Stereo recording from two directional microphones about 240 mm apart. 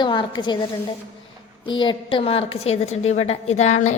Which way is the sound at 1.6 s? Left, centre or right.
Centre.